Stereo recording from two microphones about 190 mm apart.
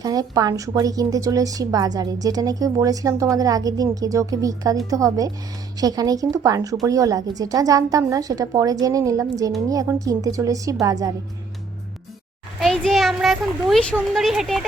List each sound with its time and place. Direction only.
0.0 s a woman's voice: 20° right (ahead or behind)
12.5 s a child's voice: centre (ahead or behind)